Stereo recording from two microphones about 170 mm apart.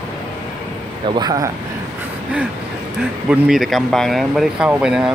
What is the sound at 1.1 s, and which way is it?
Speech, 20° right (ahead or behind).